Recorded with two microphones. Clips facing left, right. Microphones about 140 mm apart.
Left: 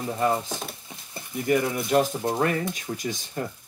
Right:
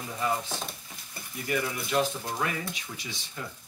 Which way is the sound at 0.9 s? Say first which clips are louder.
Left 4 dB; 20° left (ahead or behind).